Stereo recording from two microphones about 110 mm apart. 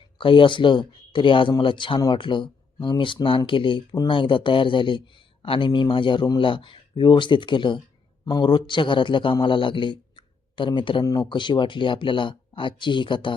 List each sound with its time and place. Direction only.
0.2 s a man's voice: 50° left (ahead or behind)
11.0 s speech: 35° left (ahead or behind)
11.3 s speech: 45° left (ahead or behind)